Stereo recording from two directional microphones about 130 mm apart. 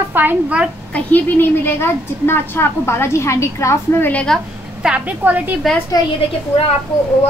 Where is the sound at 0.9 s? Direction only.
15° left (ahead or behind).